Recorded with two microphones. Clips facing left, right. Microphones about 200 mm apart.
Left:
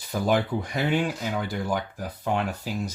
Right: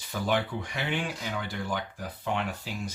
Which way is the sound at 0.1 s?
40° left (ahead or behind).